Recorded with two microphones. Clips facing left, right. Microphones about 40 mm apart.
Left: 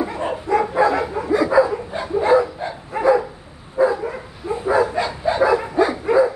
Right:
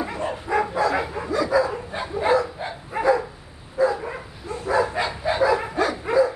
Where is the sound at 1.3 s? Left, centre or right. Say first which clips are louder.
Left 5 dB; left.